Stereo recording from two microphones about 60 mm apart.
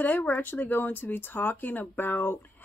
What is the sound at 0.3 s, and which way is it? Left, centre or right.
Speech, left.